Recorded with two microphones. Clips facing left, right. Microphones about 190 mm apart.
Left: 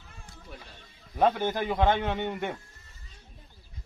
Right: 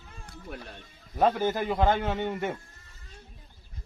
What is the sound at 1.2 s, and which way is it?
A man's voice, centre (ahead or behind).